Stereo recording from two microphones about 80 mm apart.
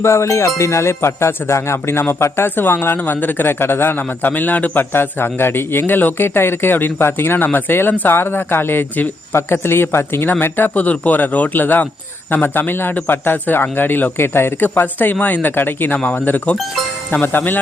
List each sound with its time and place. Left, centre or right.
0.0 s speech: left